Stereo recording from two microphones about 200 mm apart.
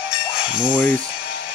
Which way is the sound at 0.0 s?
5° right (ahead or behind).